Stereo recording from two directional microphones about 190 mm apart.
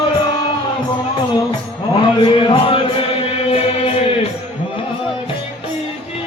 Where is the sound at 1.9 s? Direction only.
25° left (ahead or behind).